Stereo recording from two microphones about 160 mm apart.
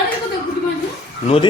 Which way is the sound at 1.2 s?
40° left (ahead or behind).